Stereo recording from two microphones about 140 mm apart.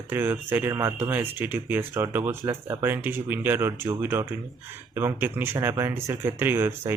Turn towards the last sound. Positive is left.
turn(degrees=-15)  # may be behind; listen again after turning